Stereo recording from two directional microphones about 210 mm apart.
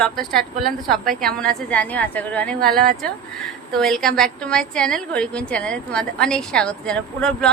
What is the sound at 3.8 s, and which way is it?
A woman's voice, centre (ahead or behind).